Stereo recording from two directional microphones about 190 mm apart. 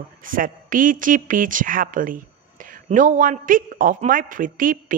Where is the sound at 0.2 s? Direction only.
45° right (ahead or behind).